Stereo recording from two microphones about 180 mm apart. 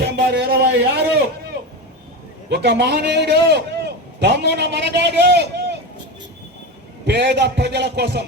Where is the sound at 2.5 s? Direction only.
70° right (ahead or behind).